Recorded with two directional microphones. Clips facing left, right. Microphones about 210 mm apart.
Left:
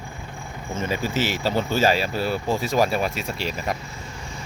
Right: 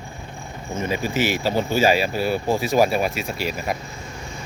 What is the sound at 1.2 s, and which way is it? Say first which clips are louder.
Speech: right 4 dB; 10° right (ahead or behind).